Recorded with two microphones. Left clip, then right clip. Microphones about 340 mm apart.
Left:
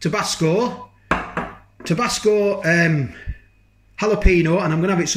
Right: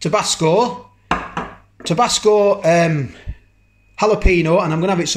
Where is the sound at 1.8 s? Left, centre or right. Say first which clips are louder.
Right 5 dB; centre.